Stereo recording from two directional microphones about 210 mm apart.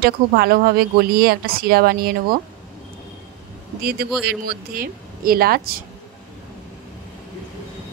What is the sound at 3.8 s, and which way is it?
Speech, 45° right (ahead or behind).